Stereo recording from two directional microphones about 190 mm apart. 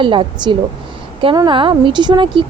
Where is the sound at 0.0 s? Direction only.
25° right (ahead or behind).